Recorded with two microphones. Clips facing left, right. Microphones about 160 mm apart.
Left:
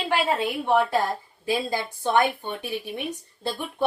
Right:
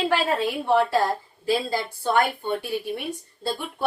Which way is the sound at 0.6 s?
15° left (ahead or behind).